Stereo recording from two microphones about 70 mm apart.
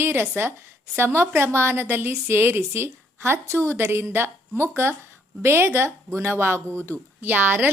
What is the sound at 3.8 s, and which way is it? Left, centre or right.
A woman's voice, right.